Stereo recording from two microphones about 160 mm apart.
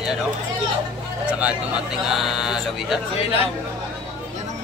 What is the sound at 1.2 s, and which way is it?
Speech, 10° right (ahead or behind).